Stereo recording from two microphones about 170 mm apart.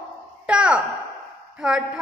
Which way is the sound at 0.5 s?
5° right (ahead or behind).